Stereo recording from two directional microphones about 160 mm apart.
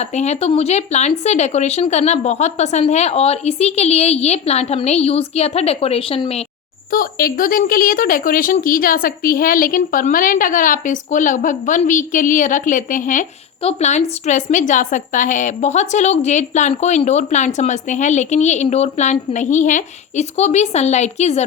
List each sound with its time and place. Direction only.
0.0 s a woman's voice: 45° left (ahead or behind)
6.9 s a woman's voice: 65° left (ahead or behind)
13.6 s speech: 40° left (ahead or behind)